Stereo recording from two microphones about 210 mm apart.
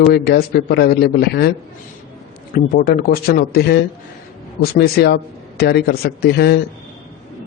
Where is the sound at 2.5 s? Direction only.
45° left (ahead or behind).